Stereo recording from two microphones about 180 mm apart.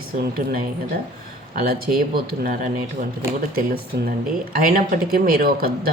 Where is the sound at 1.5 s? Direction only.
55° right (ahead or behind).